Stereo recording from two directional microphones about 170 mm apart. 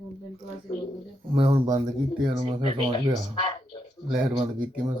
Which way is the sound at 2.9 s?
30° left (ahead or behind).